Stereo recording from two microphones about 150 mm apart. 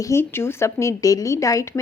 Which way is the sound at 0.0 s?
15° left (ahead or behind).